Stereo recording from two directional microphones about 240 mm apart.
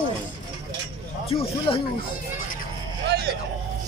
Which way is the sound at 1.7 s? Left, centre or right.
Left.